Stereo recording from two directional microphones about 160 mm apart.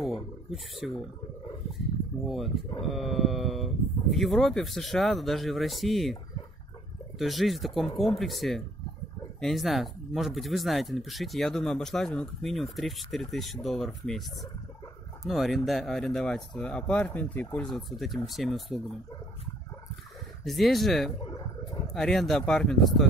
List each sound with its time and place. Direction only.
0.0 s speech: centre (ahead or behind)
2.2 s speech: centre (ahead or behind)
7.2 s speech: centre (ahead or behind)
20.4 s speech: centre (ahead or behind)
21.2 s dog: 25° left (ahead or behind)
21.9 s speech: centre (ahead or behind)